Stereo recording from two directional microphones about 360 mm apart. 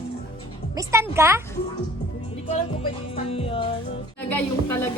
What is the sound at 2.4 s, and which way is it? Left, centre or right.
Music, centre.